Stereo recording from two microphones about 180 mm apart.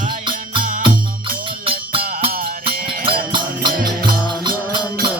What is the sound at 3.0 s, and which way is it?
Music, 30° right (ahead or behind).